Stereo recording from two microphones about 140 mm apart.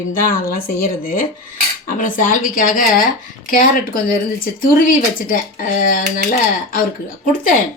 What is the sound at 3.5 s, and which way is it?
Speech, 90° left.